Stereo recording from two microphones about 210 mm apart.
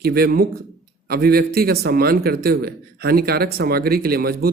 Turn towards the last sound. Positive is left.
turn(degrees=-45)  # may be behind; listen again after turning